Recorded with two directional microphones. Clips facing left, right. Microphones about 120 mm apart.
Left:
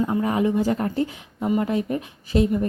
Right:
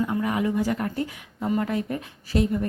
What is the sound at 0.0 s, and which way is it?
A woman's voice, 30° left (ahead or behind).